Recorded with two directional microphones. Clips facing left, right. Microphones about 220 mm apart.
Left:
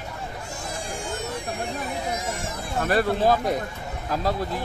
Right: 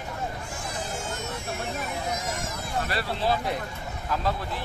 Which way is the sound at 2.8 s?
50° left (ahead or behind).